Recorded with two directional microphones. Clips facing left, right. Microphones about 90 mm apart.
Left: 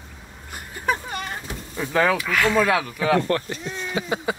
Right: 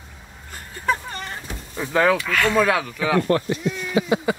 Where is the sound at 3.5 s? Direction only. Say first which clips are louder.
Right 5 dB; 35° left (ahead or behind).